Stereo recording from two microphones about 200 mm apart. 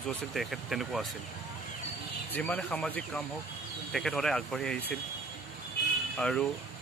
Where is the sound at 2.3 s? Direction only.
5° left (ahead or behind).